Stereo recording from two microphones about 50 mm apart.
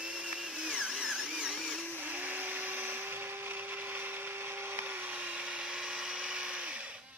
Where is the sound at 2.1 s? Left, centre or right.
Right.